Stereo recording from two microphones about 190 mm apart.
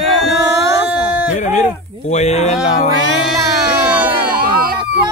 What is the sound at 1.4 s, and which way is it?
Speech, 40° left (ahead or behind).